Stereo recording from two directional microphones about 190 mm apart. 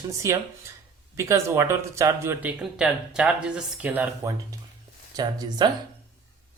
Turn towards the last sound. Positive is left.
turn(degrees=-20)  # may be behind; listen again after turning